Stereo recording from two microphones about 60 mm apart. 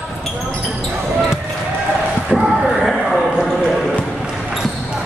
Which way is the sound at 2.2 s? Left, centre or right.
Centre.